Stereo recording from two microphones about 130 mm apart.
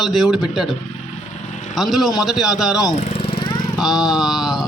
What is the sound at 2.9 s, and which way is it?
Lawn mower, 50° left (ahead or behind).